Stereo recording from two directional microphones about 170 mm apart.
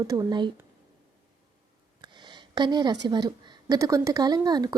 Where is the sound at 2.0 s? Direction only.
25° right (ahead or behind).